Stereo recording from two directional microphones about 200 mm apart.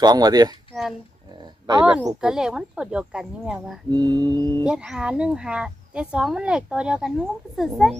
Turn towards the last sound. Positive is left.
turn(degrees=0)  # may be behind; listen again after turning